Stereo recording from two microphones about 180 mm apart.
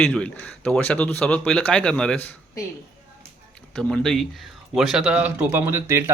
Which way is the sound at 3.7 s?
5° left (ahead or behind).